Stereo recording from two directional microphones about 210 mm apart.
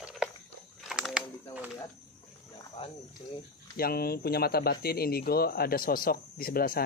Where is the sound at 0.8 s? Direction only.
Centre (ahead or behind).